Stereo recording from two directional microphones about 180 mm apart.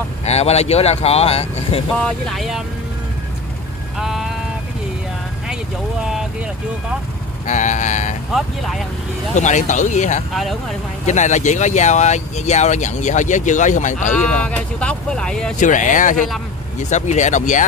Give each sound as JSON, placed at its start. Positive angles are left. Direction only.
{"t": 0.2, "sound": "speech", "side_deg": 35}
{"t": 2.0, "sound": "speech", "side_deg": 5}
{"t": 4.0, "sound": "a sound", "side_deg": 0}
{"t": 7.4, "sound": "vehicle", "side_deg": 40}
{"t": 8.3, "sound": "speech", "side_deg": 0}
{"t": 9.3, "sound": "speech", "side_deg": 40}
{"t": 10.3, "sound": "speech", "side_deg": 0}
{"t": 11.1, "sound": "speech", "side_deg": 40}
{"t": 14.4, "sound": "speech", "side_deg": 5}
{"t": 15.6, "sound": "vehicle", "side_deg": 45}
{"t": 16.9, "sound": "speech", "side_deg": 40}